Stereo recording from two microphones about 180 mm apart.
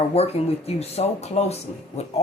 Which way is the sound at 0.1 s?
35° left (ahead or behind).